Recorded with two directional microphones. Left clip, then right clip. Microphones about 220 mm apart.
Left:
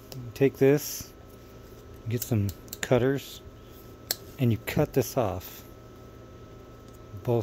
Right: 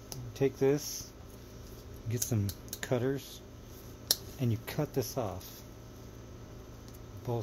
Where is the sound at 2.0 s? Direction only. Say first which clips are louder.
Left 5 dB; 25° left (ahead or behind).